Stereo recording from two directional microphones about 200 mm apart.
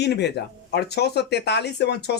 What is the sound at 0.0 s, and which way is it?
Speech, 55° left (ahead or behind).